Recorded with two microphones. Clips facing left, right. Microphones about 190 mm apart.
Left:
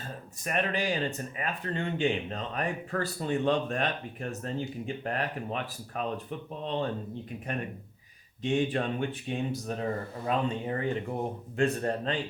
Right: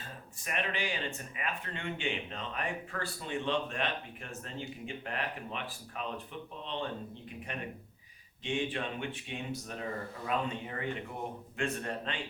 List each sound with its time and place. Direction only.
0.4 s speech: 40° left (ahead or behind)
7.5 s speech: 45° left (ahead or behind)